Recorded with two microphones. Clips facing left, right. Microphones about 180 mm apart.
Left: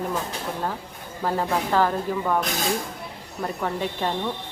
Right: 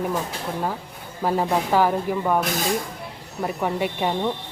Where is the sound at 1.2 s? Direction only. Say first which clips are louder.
Right 3 dB; 15° right (ahead or behind).